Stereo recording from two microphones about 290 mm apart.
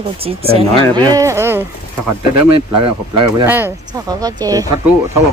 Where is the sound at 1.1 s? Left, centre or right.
Centre.